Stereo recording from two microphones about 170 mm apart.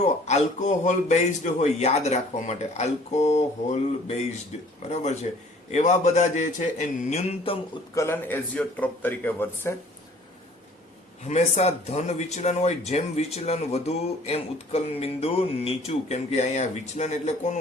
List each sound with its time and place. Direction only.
0.0 s speech: 40° left (ahead or behind)
5.7 s a man's voice: 45° left (ahead or behind)
7.9 s a man's voice: 15° left (ahead or behind)
11.2 s a man's voice: 40° left (ahead or behind)